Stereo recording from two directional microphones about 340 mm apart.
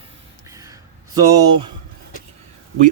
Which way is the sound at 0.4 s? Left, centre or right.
Centre.